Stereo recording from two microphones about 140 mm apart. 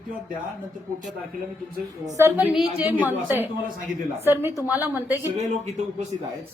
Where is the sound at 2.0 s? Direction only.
15° right (ahead or behind).